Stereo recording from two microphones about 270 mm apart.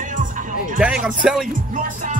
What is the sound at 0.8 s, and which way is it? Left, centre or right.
Speech, centre.